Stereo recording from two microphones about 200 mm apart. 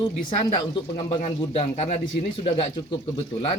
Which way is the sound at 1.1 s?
30° left (ahead or behind).